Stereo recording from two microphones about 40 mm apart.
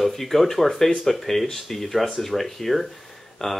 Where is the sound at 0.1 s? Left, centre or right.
Centre.